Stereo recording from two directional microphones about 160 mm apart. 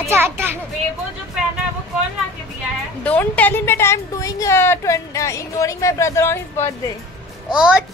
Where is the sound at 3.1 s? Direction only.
10° left (ahead or behind).